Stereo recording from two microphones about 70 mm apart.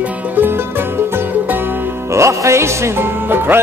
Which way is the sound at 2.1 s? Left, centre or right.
Right.